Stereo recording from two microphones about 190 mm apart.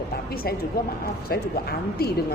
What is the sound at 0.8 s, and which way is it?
A woman's voice, 50° left (ahead or behind).